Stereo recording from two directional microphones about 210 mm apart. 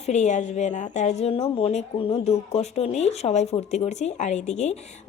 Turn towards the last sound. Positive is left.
turn(degrees=30)  # may be behind; listen again after turning